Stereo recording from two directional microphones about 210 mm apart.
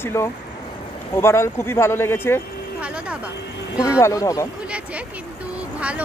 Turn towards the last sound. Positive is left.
turn(degrees=-5)  # may be behind; listen again after turning